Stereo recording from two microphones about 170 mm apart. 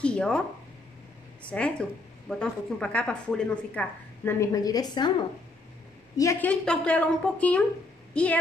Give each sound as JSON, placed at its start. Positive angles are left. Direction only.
{"t": 0.0, "sound": "speech", "side_deg": 5}
{"t": 1.5, "sound": "speech", "side_deg": 5}
{"t": 6.1, "sound": "speech", "side_deg": 20}
{"t": 6.5, "sound": "a woman's voice", "side_deg": 5}